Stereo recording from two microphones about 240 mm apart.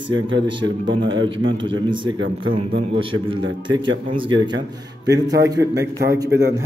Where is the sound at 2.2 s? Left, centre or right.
Right.